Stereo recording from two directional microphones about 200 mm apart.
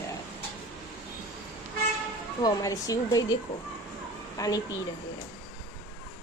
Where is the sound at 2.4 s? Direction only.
15° left (ahead or behind).